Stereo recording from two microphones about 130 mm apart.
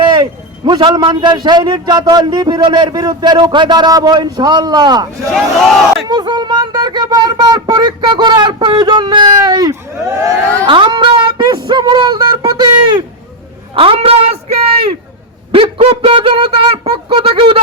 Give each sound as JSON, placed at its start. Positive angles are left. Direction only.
{"t": 0.0, "sound": "a man's voice", "side_deg": -35}
{"t": 5.3, "sound": "speech", "side_deg": 0}
{"t": 6.1, "sound": "speech", "side_deg": -35}
{"t": 10.7, "sound": "a sound", "side_deg": -40}
{"t": 13.7, "sound": "a woman's voice", "side_deg": -45}
{"t": 15.5, "sound": "a sound", "side_deg": -45}